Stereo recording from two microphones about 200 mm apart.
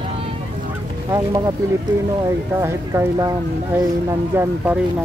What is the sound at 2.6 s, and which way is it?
Speech, 15° right (ahead or behind).